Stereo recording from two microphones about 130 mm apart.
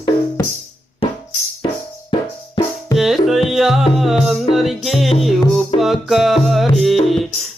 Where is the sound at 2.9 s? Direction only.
5° right (ahead or behind).